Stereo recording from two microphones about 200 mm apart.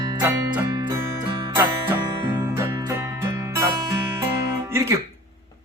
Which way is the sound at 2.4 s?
20° right (ahead or behind).